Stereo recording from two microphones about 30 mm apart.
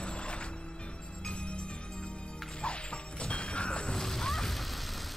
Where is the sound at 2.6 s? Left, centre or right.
Left.